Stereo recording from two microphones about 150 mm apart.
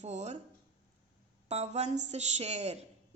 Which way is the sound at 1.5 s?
45° right (ahead or behind).